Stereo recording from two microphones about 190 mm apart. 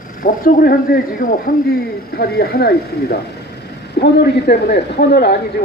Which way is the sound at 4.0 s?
55° left (ahead or behind).